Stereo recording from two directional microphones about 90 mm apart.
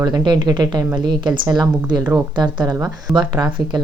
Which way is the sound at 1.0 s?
60° right (ahead or behind).